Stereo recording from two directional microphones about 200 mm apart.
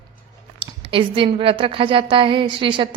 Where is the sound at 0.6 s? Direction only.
25° right (ahead or behind).